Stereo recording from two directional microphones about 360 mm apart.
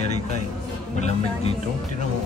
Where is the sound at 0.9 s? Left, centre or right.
Centre.